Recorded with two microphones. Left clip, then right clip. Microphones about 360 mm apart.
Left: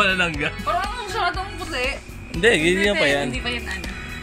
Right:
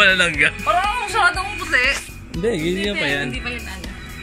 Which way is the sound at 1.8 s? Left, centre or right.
Centre.